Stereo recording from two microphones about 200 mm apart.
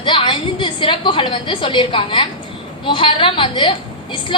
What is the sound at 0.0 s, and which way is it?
A woman's voice, 25° left (ahead or behind).